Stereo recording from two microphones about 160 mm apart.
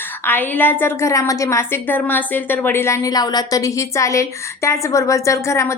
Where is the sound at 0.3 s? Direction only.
10° left (ahead or behind).